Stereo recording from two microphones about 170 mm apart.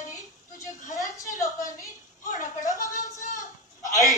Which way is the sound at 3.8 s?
20° left (ahead or behind).